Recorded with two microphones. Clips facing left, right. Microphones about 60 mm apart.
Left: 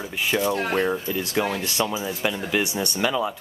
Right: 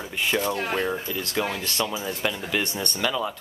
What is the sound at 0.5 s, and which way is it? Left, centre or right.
Speech, left.